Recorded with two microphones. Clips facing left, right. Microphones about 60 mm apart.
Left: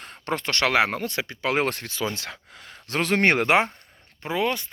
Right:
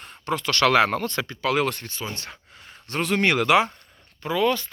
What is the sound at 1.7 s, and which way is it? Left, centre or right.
Speech, left.